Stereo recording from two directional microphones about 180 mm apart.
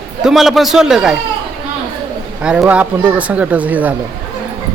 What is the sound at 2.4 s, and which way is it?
Speech, 5° right (ahead or behind).